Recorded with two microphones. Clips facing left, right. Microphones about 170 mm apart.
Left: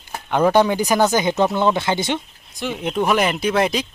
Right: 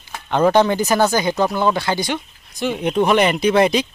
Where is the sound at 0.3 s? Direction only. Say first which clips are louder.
Right 1 dB; 10° left (ahead or behind).